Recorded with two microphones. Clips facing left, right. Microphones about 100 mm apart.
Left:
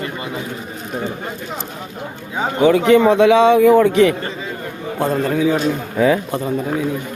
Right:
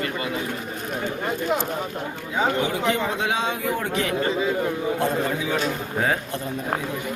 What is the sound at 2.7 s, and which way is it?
Speech, 90° left.